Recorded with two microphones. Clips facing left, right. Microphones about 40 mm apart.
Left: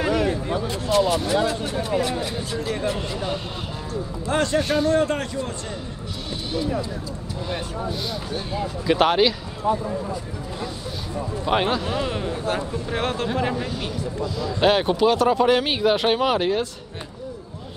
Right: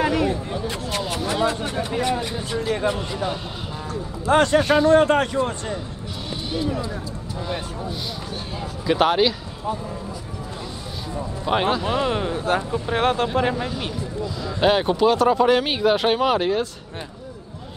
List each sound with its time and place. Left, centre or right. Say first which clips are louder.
0.7 s speech: left 8 dB; right
1.9 s speech: even; right
3.9 s a man's voice: right 6 dB; right
7.9 s speech: left 2 dB; centre
11.1 s speech: even; centre
11.9 s speech: right 4 dB; right
12.3 s a man's voice: right 3 dB; right
14.6 s speech: right 1 dB; centre